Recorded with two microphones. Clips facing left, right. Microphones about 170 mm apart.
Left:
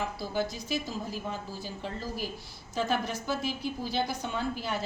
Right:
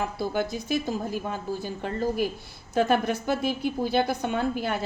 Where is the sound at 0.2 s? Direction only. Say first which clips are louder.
Right 5 dB; 55° right (ahead or behind).